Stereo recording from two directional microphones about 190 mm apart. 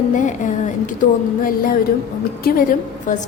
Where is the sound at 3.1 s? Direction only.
40° left (ahead or behind).